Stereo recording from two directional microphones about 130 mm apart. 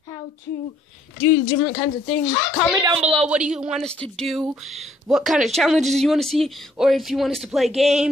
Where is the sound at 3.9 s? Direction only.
5° left (ahead or behind).